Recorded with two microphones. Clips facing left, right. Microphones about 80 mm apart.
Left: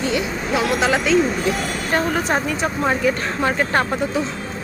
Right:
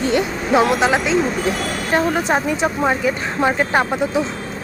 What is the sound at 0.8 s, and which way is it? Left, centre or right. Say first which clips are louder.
Speech: even; centre.